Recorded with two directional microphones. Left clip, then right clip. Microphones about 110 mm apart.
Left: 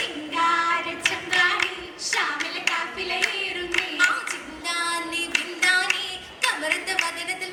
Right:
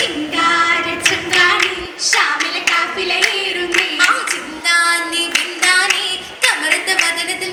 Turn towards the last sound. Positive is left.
turn(degrees=25)  # may be behind; listen again after turning